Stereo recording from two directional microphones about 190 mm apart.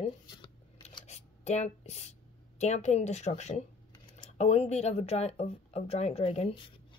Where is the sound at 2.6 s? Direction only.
35° left (ahead or behind).